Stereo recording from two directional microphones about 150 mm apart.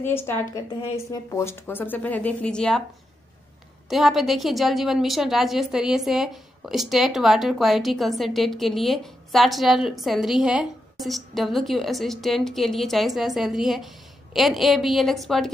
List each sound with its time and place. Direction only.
0.0 s speech: 15° left (ahead or behind)
3.9 s a woman's voice: centre (ahead or behind)